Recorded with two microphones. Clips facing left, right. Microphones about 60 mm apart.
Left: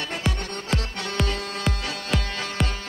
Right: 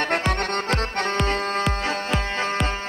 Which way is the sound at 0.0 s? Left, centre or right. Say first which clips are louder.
Right 6 dB; right.